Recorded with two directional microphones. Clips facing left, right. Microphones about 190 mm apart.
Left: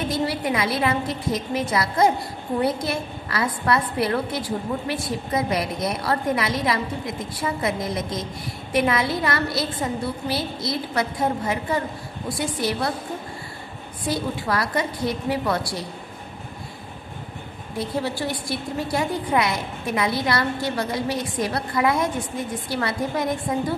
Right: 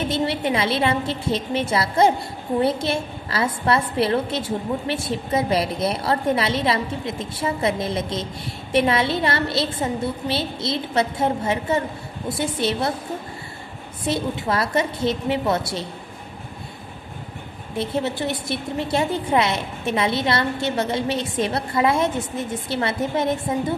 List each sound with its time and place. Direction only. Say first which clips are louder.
0.1 s a woman's voice: right 2 dB; 25° right (ahead or behind)
14.0 s a woman's voice: right 2 dB; 25° right (ahead or behind)
17.7 s a woman's voice: right 2 dB; 25° right (ahead or behind)